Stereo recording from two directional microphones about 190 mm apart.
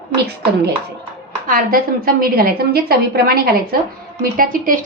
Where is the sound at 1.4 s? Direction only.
50° right (ahead or behind).